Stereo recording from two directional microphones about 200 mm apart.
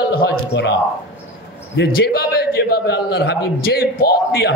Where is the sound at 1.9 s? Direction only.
50° left (ahead or behind).